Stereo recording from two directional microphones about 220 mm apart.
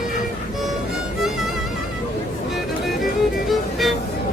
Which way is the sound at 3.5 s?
Centre (ahead or behind).